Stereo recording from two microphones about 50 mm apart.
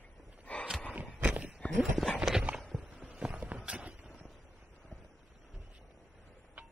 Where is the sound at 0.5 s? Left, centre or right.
Left.